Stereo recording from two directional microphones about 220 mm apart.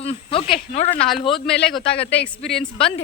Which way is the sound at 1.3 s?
Centre (ahead or behind).